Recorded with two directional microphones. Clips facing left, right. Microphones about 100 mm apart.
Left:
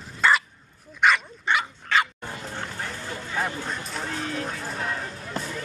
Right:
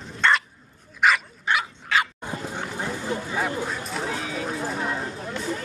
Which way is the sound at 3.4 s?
5° right (ahead or behind).